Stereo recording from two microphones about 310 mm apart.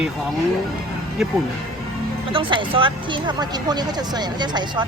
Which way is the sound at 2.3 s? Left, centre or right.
Centre.